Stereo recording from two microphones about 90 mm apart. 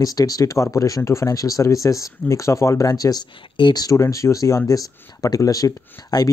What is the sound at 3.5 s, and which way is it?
Speech, 65° left (ahead or behind).